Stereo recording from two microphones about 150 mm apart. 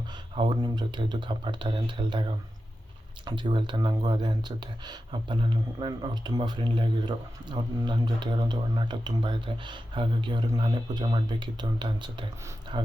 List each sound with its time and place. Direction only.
0.3 s speech: 30° right (ahead or behind)